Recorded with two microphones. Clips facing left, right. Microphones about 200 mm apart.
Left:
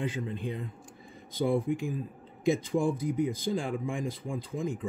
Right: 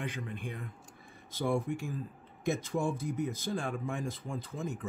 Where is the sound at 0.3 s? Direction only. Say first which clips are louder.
Left 6 dB; 20° left (ahead or behind).